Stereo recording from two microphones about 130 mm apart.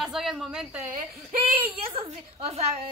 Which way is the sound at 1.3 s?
45° right (ahead or behind).